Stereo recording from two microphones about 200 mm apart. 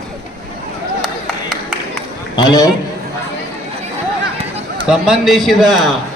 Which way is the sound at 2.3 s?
20° left (ahead or behind).